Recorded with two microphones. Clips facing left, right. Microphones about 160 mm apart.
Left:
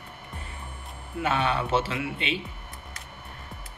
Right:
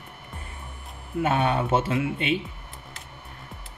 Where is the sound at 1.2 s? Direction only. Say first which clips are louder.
Right 2 dB; 50° right (ahead or behind).